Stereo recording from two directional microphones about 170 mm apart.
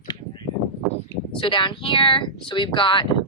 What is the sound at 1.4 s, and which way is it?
Speech, 30° left (ahead or behind).